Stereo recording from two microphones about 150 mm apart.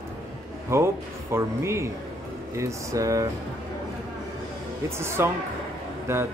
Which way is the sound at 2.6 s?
20° right (ahead or behind).